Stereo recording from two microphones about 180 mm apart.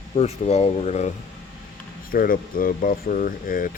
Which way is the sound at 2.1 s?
50° left (ahead or behind).